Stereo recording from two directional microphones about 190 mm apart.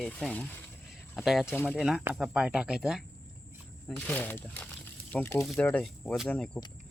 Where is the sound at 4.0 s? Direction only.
10° left (ahead or behind).